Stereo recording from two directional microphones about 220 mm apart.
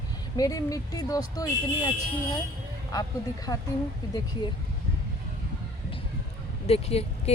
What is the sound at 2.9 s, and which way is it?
Speech, 15° left (ahead or behind).